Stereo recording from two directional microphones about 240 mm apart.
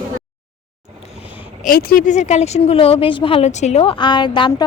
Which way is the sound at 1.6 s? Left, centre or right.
Left.